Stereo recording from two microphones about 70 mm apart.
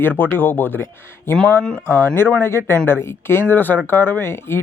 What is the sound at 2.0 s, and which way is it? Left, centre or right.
Speech, left.